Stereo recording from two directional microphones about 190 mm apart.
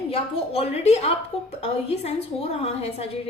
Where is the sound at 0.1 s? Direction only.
30° left (ahead or behind).